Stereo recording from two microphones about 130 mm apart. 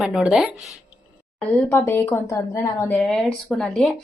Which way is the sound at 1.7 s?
20° left (ahead or behind).